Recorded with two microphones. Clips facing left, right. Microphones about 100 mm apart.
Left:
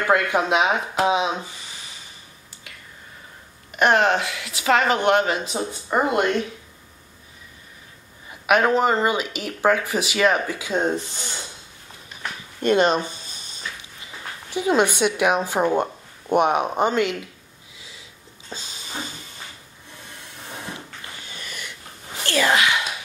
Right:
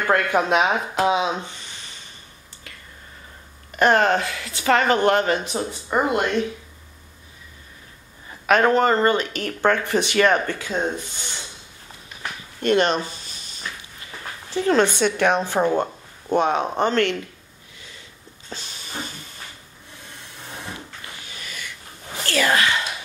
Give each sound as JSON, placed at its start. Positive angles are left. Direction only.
{"t": 0.0, "sound": "speech", "side_deg": 5}
{"t": 3.7, "sound": "speech", "side_deg": 5}
{"t": 5.7, "sound": "speech", "side_deg": 20}
{"t": 8.5, "sound": "speech", "side_deg": 5}
{"t": 10.9, "sound": "speech", "side_deg": 40}
{"t": 12.6, "sound": "speech", "side_deg": 15}
{"t": 14.5, "sound": "speech", "side_deg": 10}
{"t": 22.2, "sound": "whispering", "side_deg": 20}